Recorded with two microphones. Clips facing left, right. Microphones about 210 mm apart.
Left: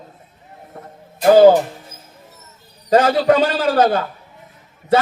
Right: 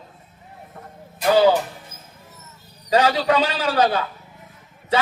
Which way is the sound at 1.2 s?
45° left (ahead or behind).